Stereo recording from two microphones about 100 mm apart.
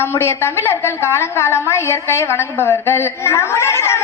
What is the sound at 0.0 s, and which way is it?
A woman's voice, 25° left (ahead or behind).